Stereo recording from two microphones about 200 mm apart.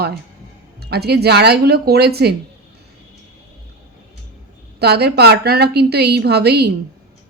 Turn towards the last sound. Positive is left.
turn(degrees=-55)  # may be behind; listen again after turning